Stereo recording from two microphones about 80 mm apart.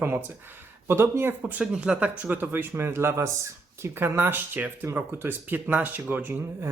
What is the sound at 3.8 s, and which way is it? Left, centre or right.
Speech, right.